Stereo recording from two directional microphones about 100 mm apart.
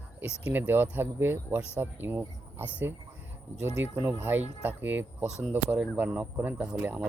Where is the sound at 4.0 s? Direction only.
20° right (ahead or behind).